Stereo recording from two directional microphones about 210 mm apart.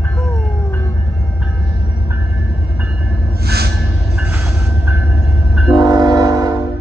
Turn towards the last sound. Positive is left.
turn(degrees=-15)  # may be behind; listen again after turning